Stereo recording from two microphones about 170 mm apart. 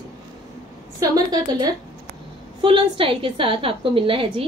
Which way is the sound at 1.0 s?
20° right (ahead or behind).